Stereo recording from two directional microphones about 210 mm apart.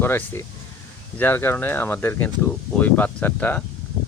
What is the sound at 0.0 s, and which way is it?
Speech, 10° left (ahead or behind).